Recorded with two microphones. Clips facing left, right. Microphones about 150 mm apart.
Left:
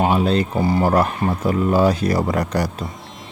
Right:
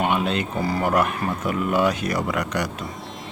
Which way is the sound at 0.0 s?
35° left (ahead or behind).